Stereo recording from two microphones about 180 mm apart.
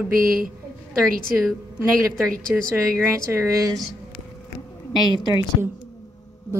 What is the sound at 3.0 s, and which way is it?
Speech, 15° right (ahead or behind).